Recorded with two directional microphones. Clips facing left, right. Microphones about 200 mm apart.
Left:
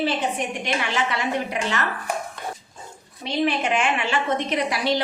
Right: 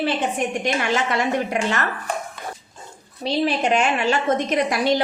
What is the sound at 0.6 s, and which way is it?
A woman's voice, 45° right (ahead or behind).